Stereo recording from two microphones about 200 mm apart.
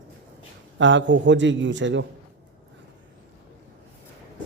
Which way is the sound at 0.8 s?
65° right (ahead or behind).